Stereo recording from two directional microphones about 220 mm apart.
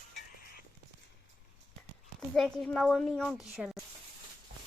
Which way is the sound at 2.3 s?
Centre (ahead or behind).